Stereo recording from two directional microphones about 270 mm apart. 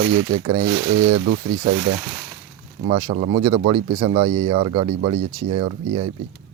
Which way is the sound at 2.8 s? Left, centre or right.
Centre.